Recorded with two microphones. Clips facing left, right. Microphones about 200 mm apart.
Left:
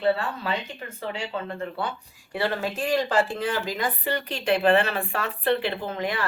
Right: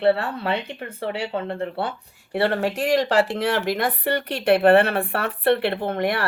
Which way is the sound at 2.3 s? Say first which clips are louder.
Right 5 dB; 65° right (ahead or behind).